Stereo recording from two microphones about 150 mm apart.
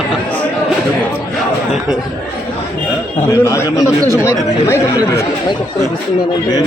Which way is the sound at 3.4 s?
20° left (ahead or behind).